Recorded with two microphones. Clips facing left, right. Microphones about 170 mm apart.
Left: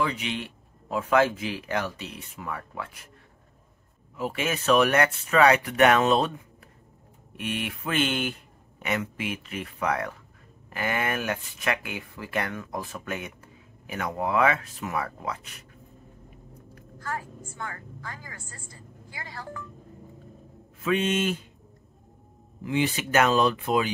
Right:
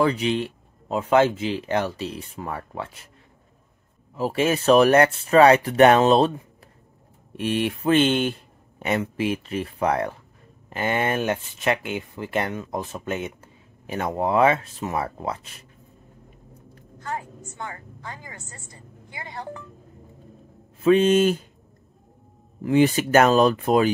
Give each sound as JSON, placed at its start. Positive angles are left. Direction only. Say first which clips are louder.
{"t": 0.0, "sound": "speech", "louder": "right 7 dB", "side_deg": -35}
{"t": 4.1, "sound": "speech", "louder": "right 7 dB", "side_deg": -35}
{"t": 16.7, "sound": "a woman's voice", "louder": "right 3 dB", "side_deg": -20}
{"t": 20.8, "sound": "speech", "louder": "right 9 dB", "side_deg": -30}
{"t": 22.6, "sound": "speech", "louder": "right 8 dB", "side_deg": -45}